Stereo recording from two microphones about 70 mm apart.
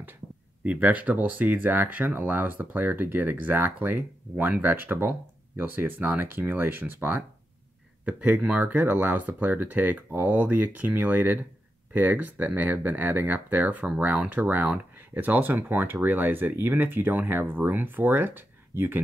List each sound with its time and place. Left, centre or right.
0.7 s speech: right
8.0 s speech: centre